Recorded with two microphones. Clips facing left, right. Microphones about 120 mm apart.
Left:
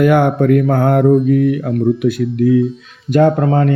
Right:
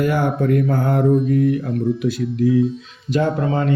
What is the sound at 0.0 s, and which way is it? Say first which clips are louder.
Speech: left 7 dB; 65° left (ahead or behind).